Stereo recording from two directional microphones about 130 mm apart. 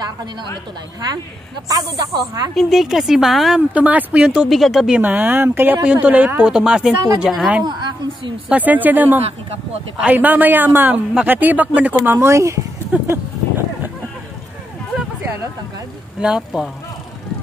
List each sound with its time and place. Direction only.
1.7 s speech: 30° right (ahead or behind)
2.5 s speech: centre (ahead or behind)
7.6 s a sound: 35° right (ahead or behind)
8.5 s speech: 10° right (ahead or behind)
16.2 s speech: 5° right (ahead or behind)